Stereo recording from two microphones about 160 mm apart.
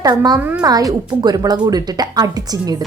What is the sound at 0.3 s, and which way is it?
Speech, 10° right (ahead or behind).